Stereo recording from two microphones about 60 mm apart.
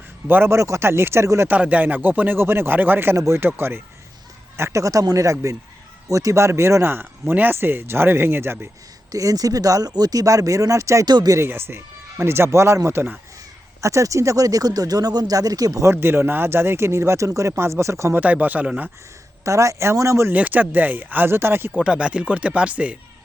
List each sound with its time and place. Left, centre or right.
0.3 s speech: right
0.5 s speech: right
1.5 s speech: right
3.2 s speech: right
4.8 s speech: right
9.1 s speech: right
11.4 s speech: right
13.8 s speech: right
15.8 s speech: right
18.1 s speech: right
19.5 s speech: right
20.3 s speech: right
21.8 s speech: centre